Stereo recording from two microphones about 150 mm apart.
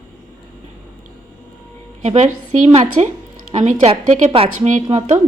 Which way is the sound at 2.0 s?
50° right (ahead or behind).